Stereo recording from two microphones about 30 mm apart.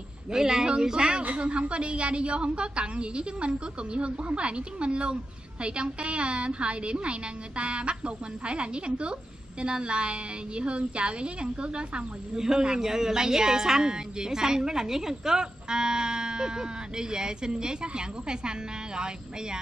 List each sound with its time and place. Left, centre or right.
0.3 s a woman's voice: right
1.4 s a woman's voice: right
12.4 s a woman's voice: centre